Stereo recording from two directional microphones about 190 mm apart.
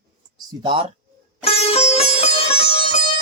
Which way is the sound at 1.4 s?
30° left (ahead or behind).